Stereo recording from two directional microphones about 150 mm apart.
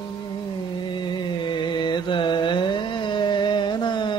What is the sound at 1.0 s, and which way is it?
Mantra, 30° left (ahead or behind).